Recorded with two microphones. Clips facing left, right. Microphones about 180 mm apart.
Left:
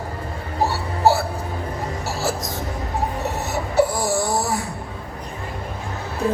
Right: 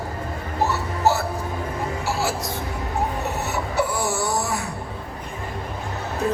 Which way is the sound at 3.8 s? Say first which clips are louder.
Left 5 dB; 35° left (ahead or behind).